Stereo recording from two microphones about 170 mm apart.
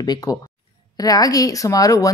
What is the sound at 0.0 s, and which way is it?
A woman's voice, 25° left (ahead or behind).